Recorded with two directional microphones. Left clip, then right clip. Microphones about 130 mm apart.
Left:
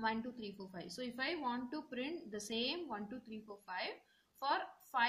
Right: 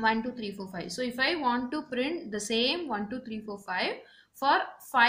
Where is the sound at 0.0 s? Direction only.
10° left (ahead or behind).